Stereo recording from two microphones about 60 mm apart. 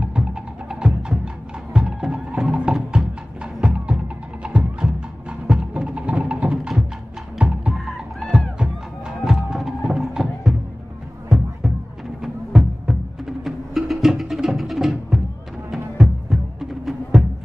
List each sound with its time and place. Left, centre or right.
0.0 s music: centre
12.2 s music: centre